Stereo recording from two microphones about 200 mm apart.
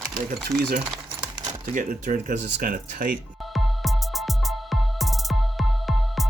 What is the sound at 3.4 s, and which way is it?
Music, centre (ahead or behind).